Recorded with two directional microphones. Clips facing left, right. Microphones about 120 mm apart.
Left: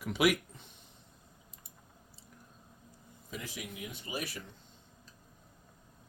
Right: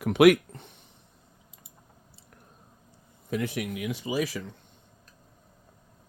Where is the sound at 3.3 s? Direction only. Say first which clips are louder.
Right 13 dB; 65° right (ahead or behind); by 4.4 s 90° right.